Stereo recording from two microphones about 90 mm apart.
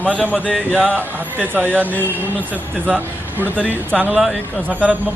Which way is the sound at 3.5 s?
10° left (ahead or behind).